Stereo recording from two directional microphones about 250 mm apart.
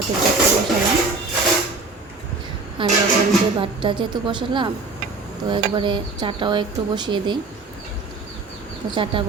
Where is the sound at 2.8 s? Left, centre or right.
Centre.